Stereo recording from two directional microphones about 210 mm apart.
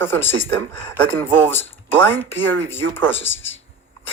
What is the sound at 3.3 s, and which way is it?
Speech, 65° left (ahead or behind).